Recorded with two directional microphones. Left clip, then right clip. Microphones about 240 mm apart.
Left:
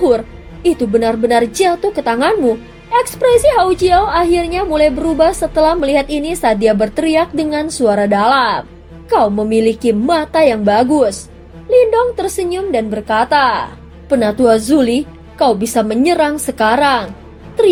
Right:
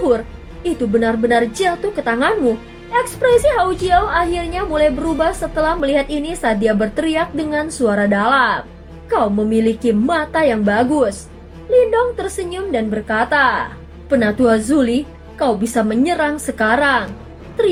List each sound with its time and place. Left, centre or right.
0.6 s a woman's voice: left